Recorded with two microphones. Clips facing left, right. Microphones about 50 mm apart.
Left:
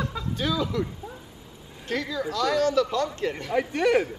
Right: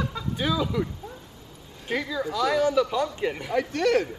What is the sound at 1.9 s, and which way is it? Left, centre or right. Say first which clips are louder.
Speech: right 1 dB; centre.